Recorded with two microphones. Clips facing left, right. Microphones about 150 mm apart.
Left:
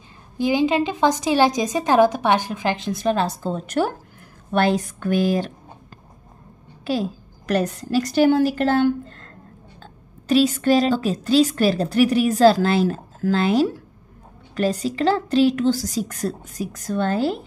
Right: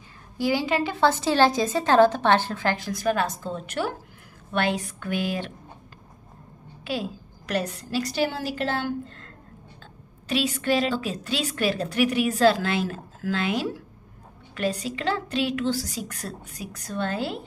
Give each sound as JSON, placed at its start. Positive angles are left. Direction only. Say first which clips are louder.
{"t": 0.4, "sound": "a woman's voice", "louder": "left 5 dB", "side_deg": 20}
{"t": 6.8, "sound": "a woman's voice", "louder": "left 6 dB", "side_deg": 40}